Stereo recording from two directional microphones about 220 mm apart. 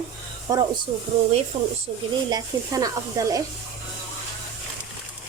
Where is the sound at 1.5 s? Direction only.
25° right (ahead or behind).